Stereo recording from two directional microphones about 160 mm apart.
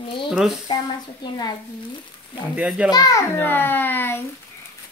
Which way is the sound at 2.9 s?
25° left (ahead or behind).